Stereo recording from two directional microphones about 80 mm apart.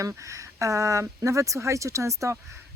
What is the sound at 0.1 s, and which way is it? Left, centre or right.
Speech, right.